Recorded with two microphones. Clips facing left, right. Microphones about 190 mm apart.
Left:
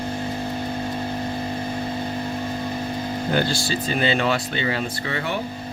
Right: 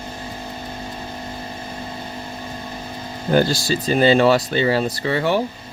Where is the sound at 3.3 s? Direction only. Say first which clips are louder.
Right 7 dB; 40° right (ahead or behind).